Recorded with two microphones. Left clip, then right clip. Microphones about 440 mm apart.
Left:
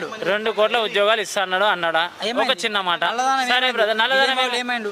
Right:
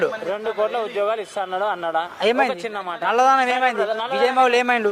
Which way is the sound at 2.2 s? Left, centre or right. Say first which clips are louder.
Right 3 dB; centre.